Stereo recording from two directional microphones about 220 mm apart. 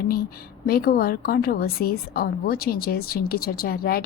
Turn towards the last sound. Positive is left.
turn(degrees=40)  # may be behind; listen again after turning